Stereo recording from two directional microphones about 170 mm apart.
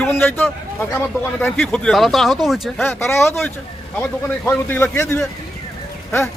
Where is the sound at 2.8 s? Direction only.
10° left (ahead or behind).